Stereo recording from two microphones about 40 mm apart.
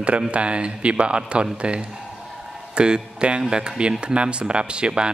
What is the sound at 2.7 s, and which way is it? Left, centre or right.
Speech, right.